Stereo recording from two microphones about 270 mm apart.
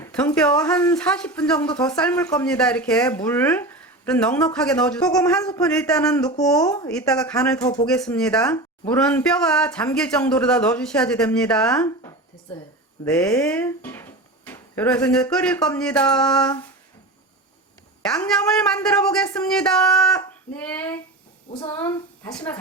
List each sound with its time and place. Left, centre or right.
0.0 s speech: centre
6.6 s a child's voice: centre
6.8 s speech: centre
18.0 s speech: centre
20.1 s child singing: centre
21.5 s a child's voice: centre
22.2 s speech: centre